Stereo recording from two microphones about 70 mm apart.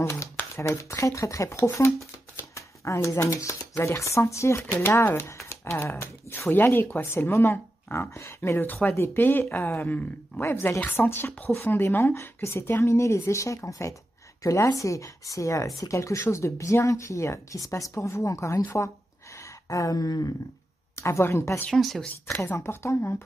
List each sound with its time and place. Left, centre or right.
0.0 s speech: left
2.3 s shuffling cards: left
3.8 s speech: left
8.1 s speech: left
8.5 s speech: left
18.6 s speech: left
19.7 s a sound: left
20.9 s speech: left
21.6 s speech: centre
22.6 s speech: left